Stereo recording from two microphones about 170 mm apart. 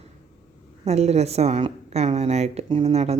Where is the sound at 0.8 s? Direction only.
40° right (ahead or behind).